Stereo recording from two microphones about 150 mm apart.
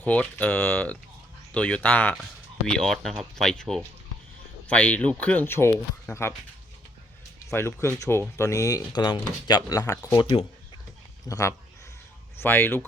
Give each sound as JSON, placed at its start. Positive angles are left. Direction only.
{"t": 0.0, "sound": "speech", "side_deg": 10}
{"t": 7.5, "sound": "speech", "side_deg": 15}